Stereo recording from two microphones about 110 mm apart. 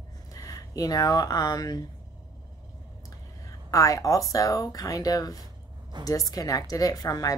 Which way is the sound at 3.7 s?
30° left (ahead or behind).